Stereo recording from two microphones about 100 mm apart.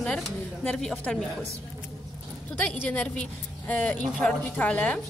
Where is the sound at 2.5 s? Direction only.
15° left (ahead or behind).